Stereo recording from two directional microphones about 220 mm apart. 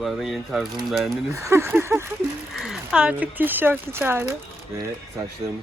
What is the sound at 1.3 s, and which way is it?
Speech, 10° right (ahead or behind).